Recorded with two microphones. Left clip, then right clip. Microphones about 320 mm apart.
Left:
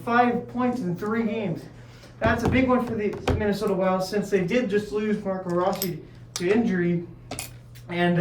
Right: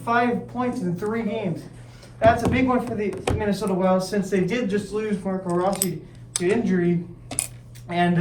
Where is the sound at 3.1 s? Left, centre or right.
Right.